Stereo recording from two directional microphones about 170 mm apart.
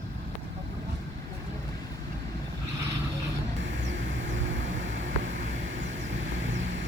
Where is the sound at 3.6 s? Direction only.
90° right.